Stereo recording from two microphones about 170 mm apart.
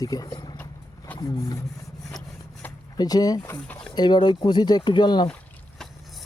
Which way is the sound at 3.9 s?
25° left (ahead or behind).